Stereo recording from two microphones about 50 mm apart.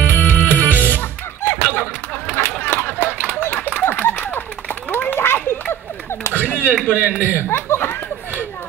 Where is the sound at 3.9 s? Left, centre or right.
Left.